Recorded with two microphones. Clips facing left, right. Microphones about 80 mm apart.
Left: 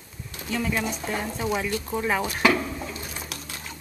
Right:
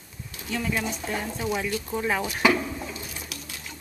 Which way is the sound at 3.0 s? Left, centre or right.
Left.